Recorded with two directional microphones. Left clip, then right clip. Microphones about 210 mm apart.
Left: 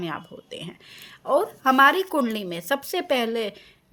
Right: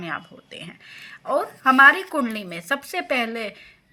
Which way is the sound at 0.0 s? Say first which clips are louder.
Right 1 dB; 55° left (ahead or behind).